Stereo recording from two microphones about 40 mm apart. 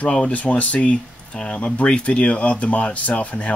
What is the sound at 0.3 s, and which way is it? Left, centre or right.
Speech, left.